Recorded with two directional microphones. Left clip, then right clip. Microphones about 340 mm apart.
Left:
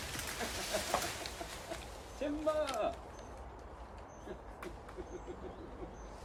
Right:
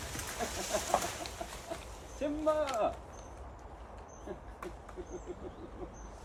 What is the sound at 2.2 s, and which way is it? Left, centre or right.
Speech, centre.